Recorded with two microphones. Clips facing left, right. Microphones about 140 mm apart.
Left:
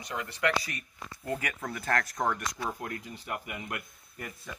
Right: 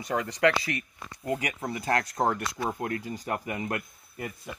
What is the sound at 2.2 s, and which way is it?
Speech, 30° right (ahead or behind).